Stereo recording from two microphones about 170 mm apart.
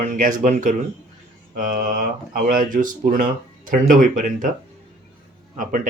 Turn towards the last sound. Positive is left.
turn(degrees=-50)  # may be behind; listen again after turning